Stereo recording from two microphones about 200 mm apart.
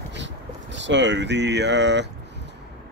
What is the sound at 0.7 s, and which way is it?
Speech, 65° right (ahead or behind).